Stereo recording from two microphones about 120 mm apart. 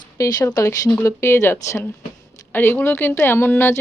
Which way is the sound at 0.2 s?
30° left (ahead or behind).